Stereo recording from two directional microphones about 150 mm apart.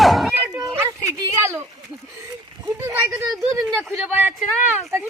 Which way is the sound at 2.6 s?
15° right (ahead or behind).